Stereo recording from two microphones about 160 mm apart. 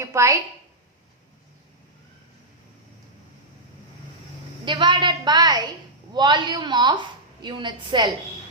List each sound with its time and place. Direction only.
0.0 s a woman's voice: 20° right (ahead or behind)
4.6 s a woman's voice: 30° right (ahead or behind)